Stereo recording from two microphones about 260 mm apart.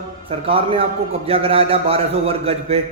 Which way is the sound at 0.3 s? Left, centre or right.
Right.